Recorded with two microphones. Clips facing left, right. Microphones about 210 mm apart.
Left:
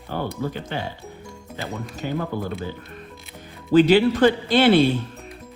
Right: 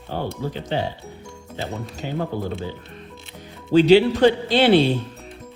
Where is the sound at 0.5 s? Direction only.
50° left (ahead or behind).